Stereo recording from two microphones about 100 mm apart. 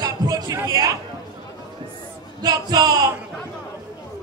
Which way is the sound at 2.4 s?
40° right (ahead or behind).